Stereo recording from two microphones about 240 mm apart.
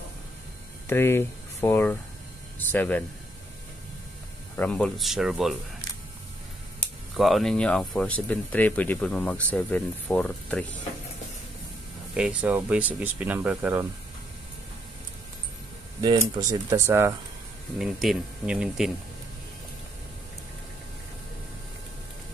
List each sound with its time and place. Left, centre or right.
0.8 s speech: centre
4.6 s speech: centre
12.1 s speech: centre
16.0 s speech: centre
17.7 s speech: centre